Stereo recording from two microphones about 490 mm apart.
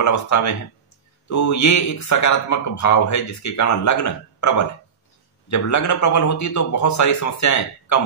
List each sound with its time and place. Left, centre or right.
0.0 s speech: left